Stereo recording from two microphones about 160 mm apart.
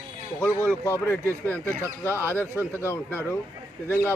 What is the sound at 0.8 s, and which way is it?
Speech, 15° left (ahead or behind).